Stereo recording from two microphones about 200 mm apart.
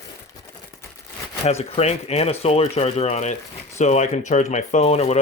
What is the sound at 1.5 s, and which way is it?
Speech, 30° left (ahead or behind).